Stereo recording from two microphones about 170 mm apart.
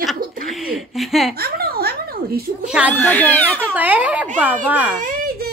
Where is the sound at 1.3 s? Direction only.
65° right (ahead or behind).